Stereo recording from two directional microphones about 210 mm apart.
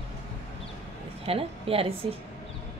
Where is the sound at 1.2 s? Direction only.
25° right (ahead or behind).